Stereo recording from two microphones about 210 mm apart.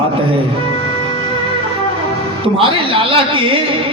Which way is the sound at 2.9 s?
25° right (ahead or behind).